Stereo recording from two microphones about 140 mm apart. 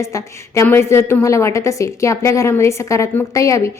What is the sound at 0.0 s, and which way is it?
A woman's voice, 20° left (ahead or behind).